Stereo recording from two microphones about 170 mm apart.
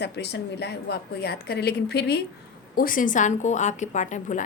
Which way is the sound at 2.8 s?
55° left (ahead or behind).